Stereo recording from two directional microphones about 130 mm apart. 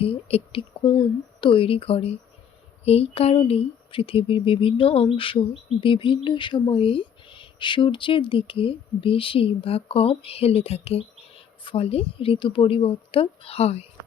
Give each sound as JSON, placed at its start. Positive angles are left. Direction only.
{"t": 0.0, "sound": "speech", "side_deg": 50}